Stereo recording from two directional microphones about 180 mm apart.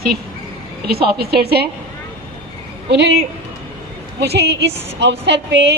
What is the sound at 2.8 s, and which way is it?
Speech, 70° right (ahead or behind).